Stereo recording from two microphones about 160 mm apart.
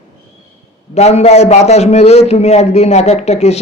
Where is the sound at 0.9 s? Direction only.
40° left (ahead or behind).